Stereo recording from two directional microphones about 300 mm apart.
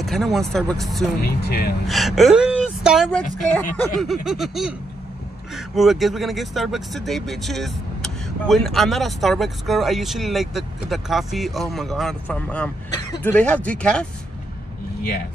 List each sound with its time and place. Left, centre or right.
0.0 s speech: centre
1.2 s speech: left
1.9 s speech: centre